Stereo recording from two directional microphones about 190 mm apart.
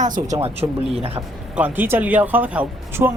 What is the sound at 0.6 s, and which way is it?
Speech, 20° right (ahead or behind).